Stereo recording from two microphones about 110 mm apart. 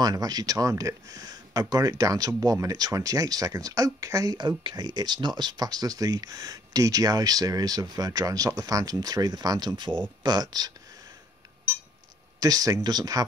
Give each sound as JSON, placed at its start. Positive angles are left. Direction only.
{"t": 0.0, "sound": "speech", "side_deg": -35}
{"t": 12.4, "sound": "speech", "side_deg": -35}